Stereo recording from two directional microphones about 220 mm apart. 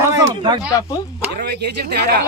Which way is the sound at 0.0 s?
20° right (ahead or behind).